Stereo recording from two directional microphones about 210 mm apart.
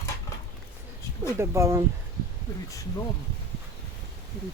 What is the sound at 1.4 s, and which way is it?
Speech, 15° right (ahead or behind).